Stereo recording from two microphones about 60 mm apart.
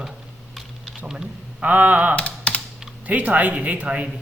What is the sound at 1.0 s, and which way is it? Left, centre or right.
Speech, centre.